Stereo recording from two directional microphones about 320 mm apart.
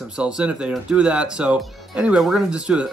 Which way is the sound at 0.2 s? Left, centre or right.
Centre.